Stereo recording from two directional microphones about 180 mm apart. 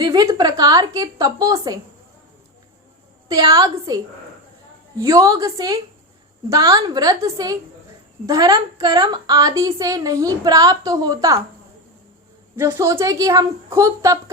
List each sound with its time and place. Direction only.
0.0 s a woman's voice: 20° right (ahead or behind)
3.2 s a woman's voice: 20° right (ahead or behind)
12.5 s a woman's voice: 15° right (ahead or behind)